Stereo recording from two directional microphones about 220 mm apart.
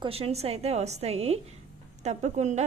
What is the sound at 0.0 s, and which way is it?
A woman's voice, 25° right (ahead or behind).